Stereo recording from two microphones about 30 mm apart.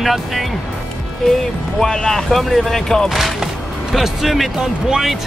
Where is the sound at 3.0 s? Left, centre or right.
Centre.